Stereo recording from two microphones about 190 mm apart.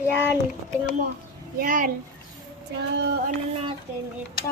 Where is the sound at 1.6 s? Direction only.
45° right (ahead or behind).